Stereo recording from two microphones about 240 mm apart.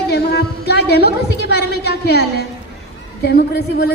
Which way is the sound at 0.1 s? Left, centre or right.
Left.